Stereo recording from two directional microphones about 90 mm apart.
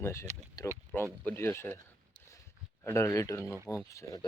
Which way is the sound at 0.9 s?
15° left (ahead or behind).